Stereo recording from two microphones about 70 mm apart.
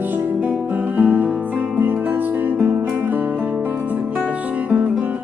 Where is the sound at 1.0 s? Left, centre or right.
Right.